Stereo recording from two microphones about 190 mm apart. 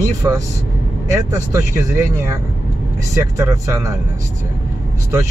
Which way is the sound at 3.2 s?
15° right (ahead or behind).